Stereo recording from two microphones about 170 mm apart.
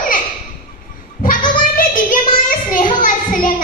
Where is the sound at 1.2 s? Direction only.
50° left (ahead or behind).